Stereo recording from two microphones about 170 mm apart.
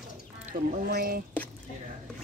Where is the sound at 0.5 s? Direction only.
55° right (ahead or behind).